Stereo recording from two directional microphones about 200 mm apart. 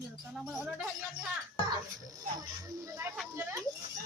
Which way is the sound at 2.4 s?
15° right (ahead or behind).